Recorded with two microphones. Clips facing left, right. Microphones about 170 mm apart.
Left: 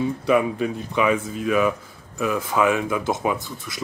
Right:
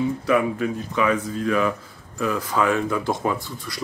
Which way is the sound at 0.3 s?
15° left (ahead or behind).